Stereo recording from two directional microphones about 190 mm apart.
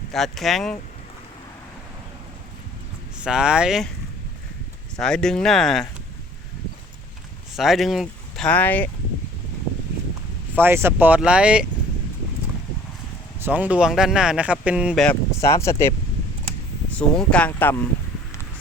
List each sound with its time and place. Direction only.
0.1 s speech: centre (ahead or behind)
3.2 s speech: 5° right (ahead or behind)
4.9 s speech: 5° left (ahead or behind)
7.5 s speech: centre (ahead or behind)
10.6 s speech: 10° right (ahead or behind)
13.4 s speech: 10° right (ahead or behind)
15.0 s speech: 10° left (ahead or behind)